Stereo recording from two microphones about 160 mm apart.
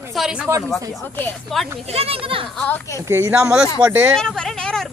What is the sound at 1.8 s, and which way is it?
Speech, 40° right (ahead or behind).